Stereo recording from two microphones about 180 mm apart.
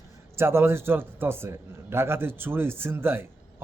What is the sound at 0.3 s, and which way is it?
A man's voice, 15° right (ahead or behind).